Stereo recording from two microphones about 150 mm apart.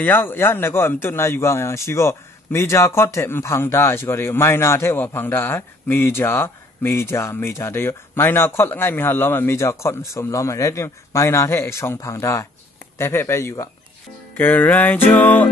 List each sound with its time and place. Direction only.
0.0 s a man's voice: 15° left (ahead or behind)